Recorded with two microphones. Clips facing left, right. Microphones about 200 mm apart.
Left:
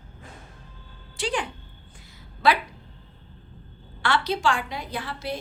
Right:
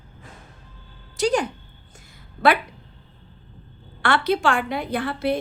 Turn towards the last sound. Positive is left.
turn(degrees=-60)  # may be behind; listen again after turning